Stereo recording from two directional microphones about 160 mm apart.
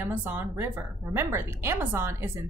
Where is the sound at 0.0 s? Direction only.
10° right (ahead or behind).